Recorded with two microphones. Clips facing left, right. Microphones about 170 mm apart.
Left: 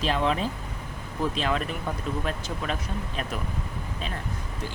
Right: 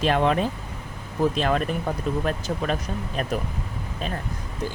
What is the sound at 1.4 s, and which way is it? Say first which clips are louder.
Speech: right 4 dB; 50° right (ahead or behind).